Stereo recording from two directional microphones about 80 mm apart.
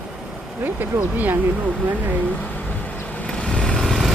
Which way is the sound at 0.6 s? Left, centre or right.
Right.